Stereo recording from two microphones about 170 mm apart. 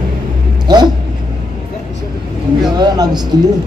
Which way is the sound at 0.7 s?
25° right (ahead or behind).